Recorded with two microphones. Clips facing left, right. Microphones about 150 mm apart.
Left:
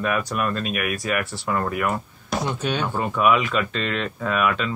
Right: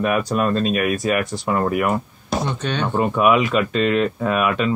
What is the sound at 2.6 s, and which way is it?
Speech, 10° left (ahead or behind).